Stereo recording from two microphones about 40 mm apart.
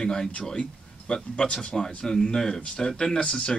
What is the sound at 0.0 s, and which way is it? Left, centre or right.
Speech, centre.